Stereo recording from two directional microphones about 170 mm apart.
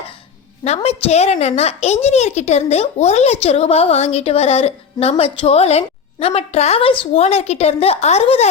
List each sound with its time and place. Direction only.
0.6 s a child's voice: 40° left (ahead or behind)